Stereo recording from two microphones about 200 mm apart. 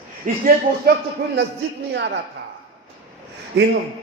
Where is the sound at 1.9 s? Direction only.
60° right (ahead or behind).